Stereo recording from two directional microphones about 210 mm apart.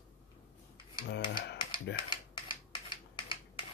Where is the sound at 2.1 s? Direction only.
20° left (ahead or behind).